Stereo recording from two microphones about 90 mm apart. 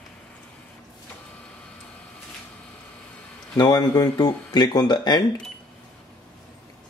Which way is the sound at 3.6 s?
50° left (ahead or behind).